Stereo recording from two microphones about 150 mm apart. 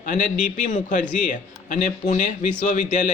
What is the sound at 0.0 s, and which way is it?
A man's voice, 60° left (ahead or behind).